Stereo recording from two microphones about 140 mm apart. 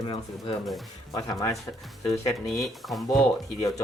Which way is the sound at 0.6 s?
Centre (ahead or behind).